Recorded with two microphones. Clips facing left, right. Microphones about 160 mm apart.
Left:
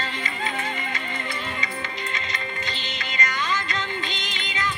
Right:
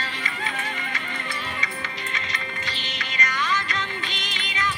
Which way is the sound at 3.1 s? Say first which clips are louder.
Even; 30° left (ahead or behind).